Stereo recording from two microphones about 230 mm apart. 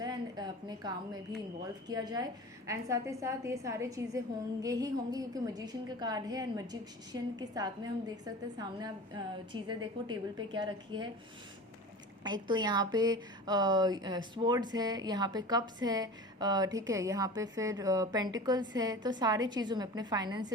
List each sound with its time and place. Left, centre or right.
0.0 s a sound: centre
1.6 s a woman's voice: centre
12.2 s a woman's voice: centre